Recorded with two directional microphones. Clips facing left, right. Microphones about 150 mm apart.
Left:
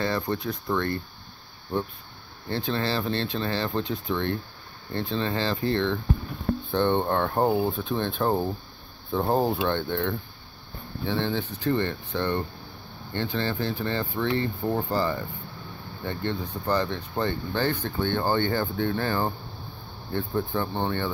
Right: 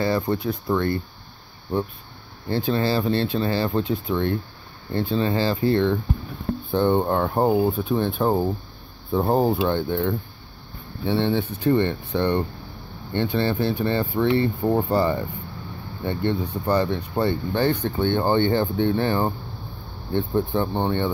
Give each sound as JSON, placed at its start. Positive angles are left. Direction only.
{"t": 0.0, "sound": "speech", "side_deg": -10}
{"t": 2.5, "sound": "speech", "side_deg": -5}
{"t": 14.7, "sound": "speech", "side_deg": -25}